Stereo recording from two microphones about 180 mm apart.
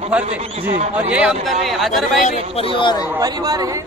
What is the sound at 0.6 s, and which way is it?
Speech, 45° right (ahead or behind).